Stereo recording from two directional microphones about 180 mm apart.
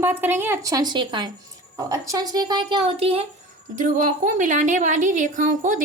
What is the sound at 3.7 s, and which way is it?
A woman's voice, 45° right (ahead or behind).